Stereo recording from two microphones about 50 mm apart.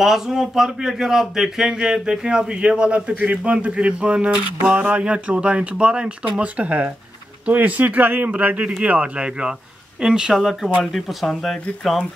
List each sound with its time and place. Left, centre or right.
0.0 s speech: centre